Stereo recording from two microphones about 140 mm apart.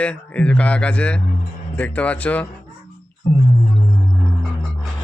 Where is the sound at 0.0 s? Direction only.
10° left (ahead or behind).